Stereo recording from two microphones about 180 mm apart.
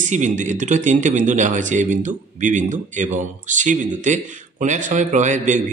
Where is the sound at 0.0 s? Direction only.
40° right (ahead or behind).